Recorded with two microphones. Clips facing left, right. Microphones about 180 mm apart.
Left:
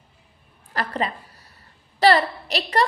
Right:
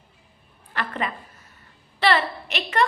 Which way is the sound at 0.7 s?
35° left (ahead or behind).